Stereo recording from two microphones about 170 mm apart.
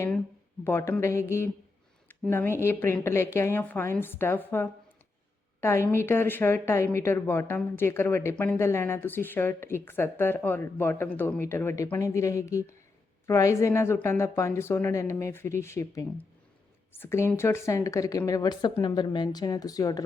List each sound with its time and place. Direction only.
0.6 s a woman's voice: 15° left (ahead or behind)